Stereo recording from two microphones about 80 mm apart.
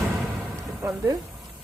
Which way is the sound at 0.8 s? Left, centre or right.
Right.